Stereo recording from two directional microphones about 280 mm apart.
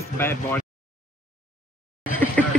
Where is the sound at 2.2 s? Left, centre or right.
Centre.